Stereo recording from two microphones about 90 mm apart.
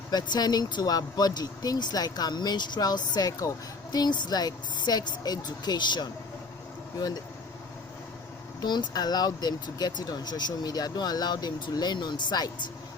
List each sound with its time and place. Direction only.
0.1 s speech: 50° left (ahead or behind)
8.6 s speech: 55° left (ahead or behind)